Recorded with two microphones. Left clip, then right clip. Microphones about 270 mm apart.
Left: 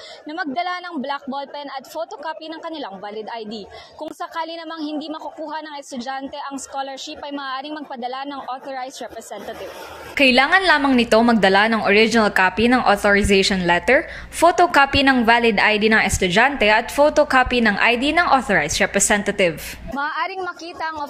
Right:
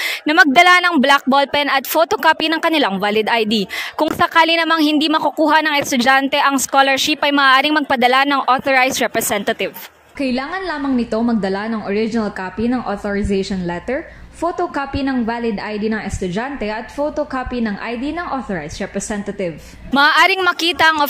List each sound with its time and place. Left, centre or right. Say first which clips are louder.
0.3 s speech: right 15 dB; right
10.1 s a woman's voice: left 8 dB; left
20.0 s speech: right 12 dB; right